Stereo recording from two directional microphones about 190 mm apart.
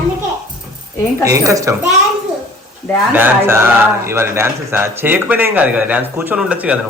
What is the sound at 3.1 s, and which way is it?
Speech, 10° right (ahead or behind).